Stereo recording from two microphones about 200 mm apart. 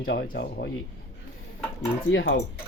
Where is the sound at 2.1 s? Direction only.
65° left (ahead or behind).